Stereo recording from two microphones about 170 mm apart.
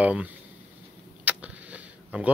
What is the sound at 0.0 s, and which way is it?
Speech, 10° right (ahead or behind).